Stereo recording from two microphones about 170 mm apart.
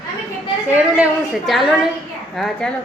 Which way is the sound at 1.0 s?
Centre (ahead or behind).